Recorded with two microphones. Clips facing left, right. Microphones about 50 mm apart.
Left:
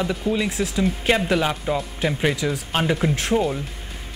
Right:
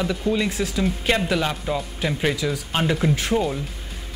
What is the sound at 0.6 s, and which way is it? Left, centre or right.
Speech, centre.